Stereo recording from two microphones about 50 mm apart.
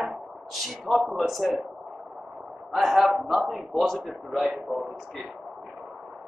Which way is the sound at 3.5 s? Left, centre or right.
Centre.